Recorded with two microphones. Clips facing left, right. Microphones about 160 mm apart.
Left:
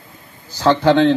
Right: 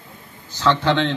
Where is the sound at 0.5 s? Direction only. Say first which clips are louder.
Left 5 dB; 35° left (ahead or behind).